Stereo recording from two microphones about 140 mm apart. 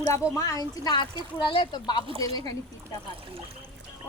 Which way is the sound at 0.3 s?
25° left (ahead or behind).